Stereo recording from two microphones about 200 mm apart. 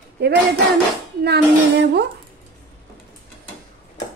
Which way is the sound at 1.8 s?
55° right (ahead or behind).